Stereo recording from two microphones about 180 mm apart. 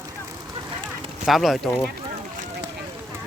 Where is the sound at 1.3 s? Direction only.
Centre (ahead or behind).